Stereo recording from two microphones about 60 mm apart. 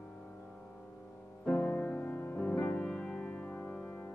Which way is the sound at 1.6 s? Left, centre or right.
Left.